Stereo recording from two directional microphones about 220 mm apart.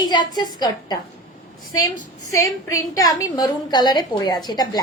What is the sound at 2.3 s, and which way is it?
A woman's voice, 15° left (ahead or behind).